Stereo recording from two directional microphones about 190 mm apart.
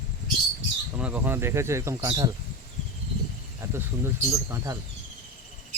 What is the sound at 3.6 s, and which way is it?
Speech, 15° right (ahead or behind).